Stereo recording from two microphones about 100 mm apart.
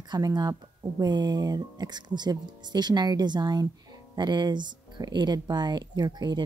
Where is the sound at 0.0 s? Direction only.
45° right (ahead or behind).